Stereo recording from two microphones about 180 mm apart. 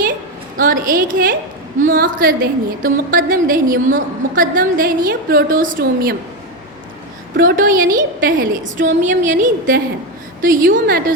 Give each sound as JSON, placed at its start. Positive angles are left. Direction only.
{"t": 0.6, "sound": "a woman's voice", "side_deg": -50}
{"t": 7.3, "sound": "a woman's voice", "side_deg": -50}